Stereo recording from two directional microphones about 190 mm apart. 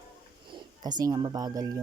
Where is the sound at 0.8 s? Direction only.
20° right (ahead or behind).